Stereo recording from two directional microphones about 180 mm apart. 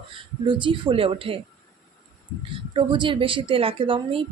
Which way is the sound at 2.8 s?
25° right (ahead or behind).